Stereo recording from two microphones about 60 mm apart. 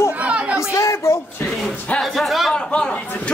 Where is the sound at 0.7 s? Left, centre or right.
Left.